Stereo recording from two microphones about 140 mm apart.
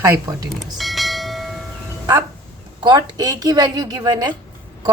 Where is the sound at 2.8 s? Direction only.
30° right (ahead or behind).